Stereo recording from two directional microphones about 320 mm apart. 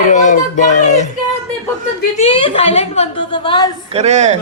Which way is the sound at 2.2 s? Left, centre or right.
Centre.